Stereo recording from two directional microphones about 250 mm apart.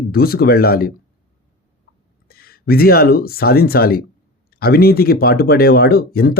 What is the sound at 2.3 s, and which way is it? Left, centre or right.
Speech, left.